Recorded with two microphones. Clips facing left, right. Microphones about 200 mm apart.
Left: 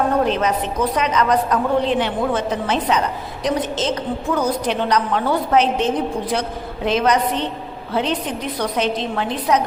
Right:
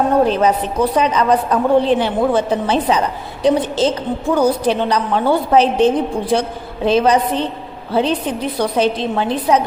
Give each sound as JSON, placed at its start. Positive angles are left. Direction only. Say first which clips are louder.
{"t": 0.3, "sound": "a woman's voice", "louder": "right 4 dB", "side_deg": -30}